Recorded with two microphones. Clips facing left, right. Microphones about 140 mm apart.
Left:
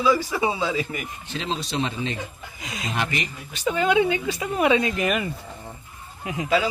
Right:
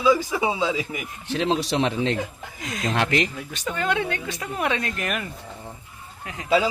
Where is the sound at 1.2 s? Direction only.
65° right (ahead or behind).